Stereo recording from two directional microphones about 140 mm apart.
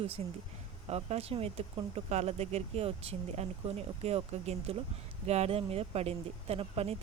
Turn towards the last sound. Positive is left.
turn(degrees=-45)  # may be behind; listen again after turning